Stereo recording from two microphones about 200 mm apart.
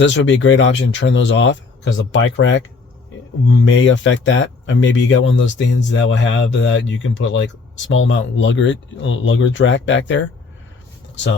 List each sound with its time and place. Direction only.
0.0 s speech: 65° left (ahead or behind)